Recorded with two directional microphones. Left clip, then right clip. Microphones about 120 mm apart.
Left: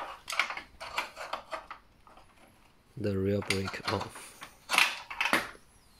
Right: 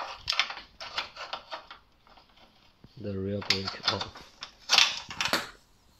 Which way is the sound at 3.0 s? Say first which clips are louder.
Left 4 dB; 40° left (ahead or behind).